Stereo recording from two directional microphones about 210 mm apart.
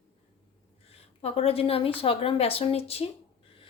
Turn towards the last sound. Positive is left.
turn(degrees=30)  # may be behind; listen again after turning